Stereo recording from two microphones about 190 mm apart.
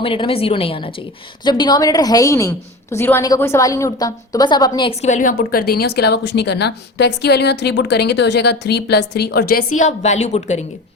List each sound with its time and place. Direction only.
0.0 s a woman's voice: 30° left (ahead or behind); by 9.6 s 55° left (ahead or behind)
9.7 s a woman's voice: 40° left (ahead or behind)